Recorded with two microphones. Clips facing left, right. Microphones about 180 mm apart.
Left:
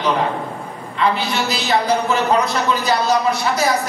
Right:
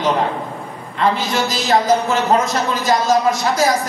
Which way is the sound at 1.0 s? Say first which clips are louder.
Right 1 dB; 45° right (ahead or behind).